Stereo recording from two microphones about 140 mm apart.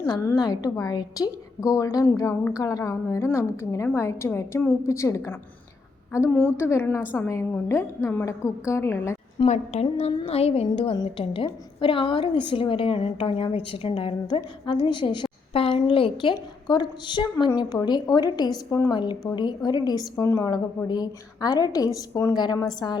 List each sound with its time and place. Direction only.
0.0 s a woman's voice: 25° left (ahead or behind)
6.6 s a woman's voice: 20° left (ahead or behind)
9.4 s a woman's voice: 35° left (ahead or behind)
9.8 s music: 40° left (ahead or behind)
10.9 s a woman's voice: 35° left (ahead or behind)